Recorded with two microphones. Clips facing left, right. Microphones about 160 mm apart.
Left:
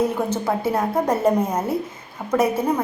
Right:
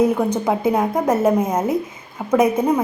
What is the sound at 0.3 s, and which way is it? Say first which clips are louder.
A woman's voice: right 4 dB; 15° right (ahead or behind).